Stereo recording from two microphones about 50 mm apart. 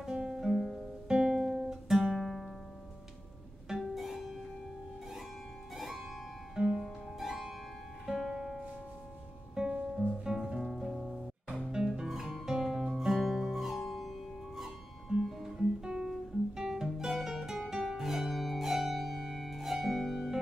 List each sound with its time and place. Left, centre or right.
0.0 s music: centre
2.1 s music: centre
3.7 s music: centre
5.8 s music: centre
6.5 s music: centre
6.8 s music: centre
10.2 s music: centre
10.6 s music: centre
11.7 s music: centre
14.6 s guitar: centre